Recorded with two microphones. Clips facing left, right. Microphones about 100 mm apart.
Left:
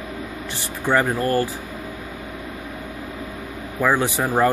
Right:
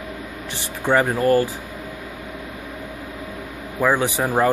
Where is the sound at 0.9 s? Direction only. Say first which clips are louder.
Right 3 dB; 15° right (ahead or behind).